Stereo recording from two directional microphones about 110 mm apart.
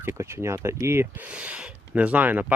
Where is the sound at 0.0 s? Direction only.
25° right (ahead or behind).